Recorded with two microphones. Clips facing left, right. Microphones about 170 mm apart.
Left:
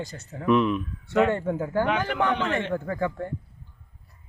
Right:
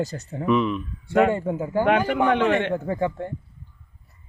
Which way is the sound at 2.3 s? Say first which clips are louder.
Right 6 dB; 60° right (ahead or behind).